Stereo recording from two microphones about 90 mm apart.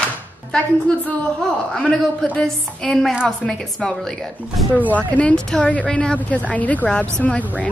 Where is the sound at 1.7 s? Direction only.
10° left (ahead or behind).